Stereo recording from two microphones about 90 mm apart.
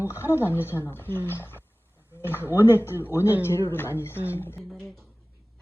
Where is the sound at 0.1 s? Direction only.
30° left (ahead or behind).